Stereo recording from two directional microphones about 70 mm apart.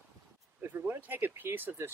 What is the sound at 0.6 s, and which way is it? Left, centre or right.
Speech, right.